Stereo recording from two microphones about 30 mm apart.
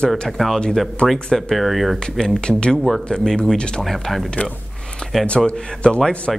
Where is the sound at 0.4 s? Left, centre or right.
Centre.